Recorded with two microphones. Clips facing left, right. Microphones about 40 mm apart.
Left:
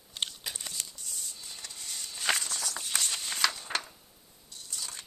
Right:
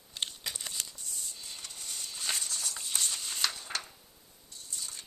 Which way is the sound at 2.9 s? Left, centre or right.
Left.